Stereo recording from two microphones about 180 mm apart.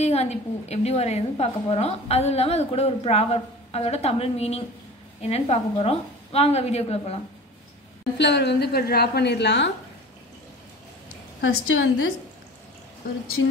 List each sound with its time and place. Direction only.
0.0 s a woman's voice: 35° left (ahead or behind)
8.2 s a woman's voice: 70° left (ahead or behind)
11.4 s a woman's voice: 90° left
13.4 s a woman's voice: 90° left